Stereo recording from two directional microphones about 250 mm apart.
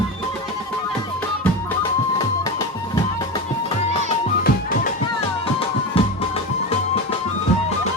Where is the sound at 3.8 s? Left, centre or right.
Left.